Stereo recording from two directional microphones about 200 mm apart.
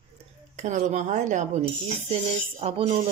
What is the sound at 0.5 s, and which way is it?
Speech, 40° right (ahead or behind).